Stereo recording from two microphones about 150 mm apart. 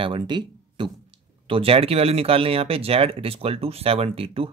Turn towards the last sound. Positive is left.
turn(degrees=-40)  # may be behind; listen again after turning